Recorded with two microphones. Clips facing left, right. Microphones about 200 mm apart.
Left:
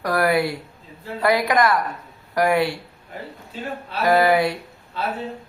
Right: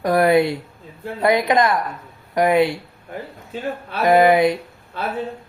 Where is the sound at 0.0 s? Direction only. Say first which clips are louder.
Right 5 dB; 20° right (ahead or behind).